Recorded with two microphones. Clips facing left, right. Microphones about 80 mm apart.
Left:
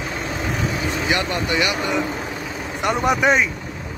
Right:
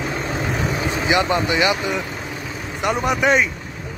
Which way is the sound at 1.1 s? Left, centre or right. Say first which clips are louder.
Right 5 dB; right.